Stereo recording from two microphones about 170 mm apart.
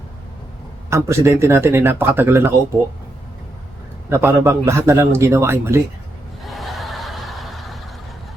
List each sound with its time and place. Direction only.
0.9 s a man's voice: 15° right (ahead or behind)
4.1 s a man's voice: 15° right (ahead or behind)
6.4 s a sound: centre (ahead or behind)